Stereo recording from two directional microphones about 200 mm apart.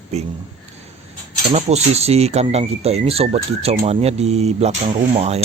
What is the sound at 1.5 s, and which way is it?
Speech, 35° right (ahead or behind).